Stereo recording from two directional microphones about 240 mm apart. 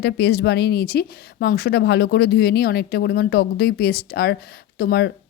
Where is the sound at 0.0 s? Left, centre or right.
Left.